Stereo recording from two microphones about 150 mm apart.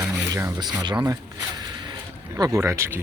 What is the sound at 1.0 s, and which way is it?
Zipper, 25° right (ahead or behind).